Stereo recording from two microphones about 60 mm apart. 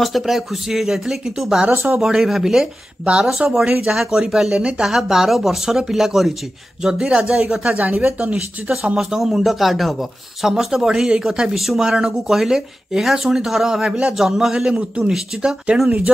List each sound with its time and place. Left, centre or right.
0.0 s speech: centre
1.7 s speech: right
2.0 s speech: centre
8.9 s speech: centre